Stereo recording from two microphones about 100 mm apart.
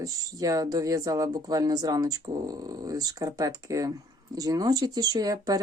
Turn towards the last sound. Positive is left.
turn(degrees=-40)  # may be behind; listen again after turning